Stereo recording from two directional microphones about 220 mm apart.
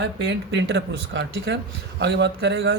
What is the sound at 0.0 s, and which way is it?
A man's voice, 50° right (ahead or behind).